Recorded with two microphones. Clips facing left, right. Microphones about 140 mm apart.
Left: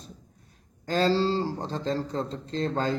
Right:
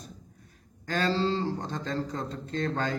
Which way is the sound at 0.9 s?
30° left (ahead or behind).